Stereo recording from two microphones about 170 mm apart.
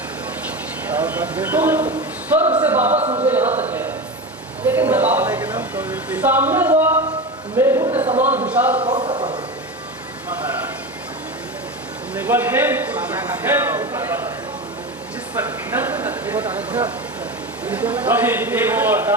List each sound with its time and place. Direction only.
0.9 s a man's voice: 10° right (ahead or behind)
2.9 s speech: 40° right (ahead or behind)
3.2 s a sound: 10° right (ahead or behind)
5.7 s speech: 10° right (ahead or behind)
7.5 s a sound: 15° right (ahead or behind)
8.4 s a man's voice: 10° right (ahead or behind)
9.0 s a sound: 25° right (ahead or behind)
12.2 s a man's voice: 10° right (ahead or behind)
15.4 s a man's voice: 10° right (ahead or behind)